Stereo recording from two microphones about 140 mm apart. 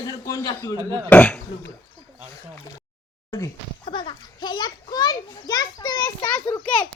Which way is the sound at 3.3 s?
20° left (ahead or behind).